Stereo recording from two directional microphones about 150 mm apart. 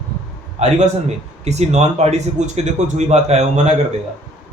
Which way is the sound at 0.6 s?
45° right (ahead or behind).